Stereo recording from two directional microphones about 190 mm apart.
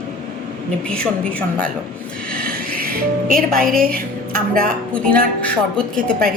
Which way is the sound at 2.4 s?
50° right (ahead or behind).